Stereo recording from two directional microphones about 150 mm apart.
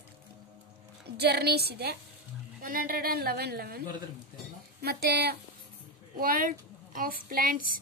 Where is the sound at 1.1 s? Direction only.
90° right.